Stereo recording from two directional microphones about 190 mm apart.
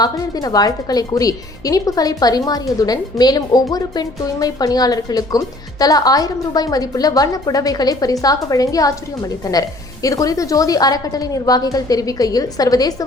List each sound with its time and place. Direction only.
0.0 s a woman's voice: 20° left (ahead or behind)